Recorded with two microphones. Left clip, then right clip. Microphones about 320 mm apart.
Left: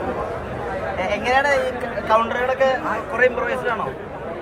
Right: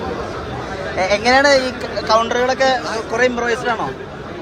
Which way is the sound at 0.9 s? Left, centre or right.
Right.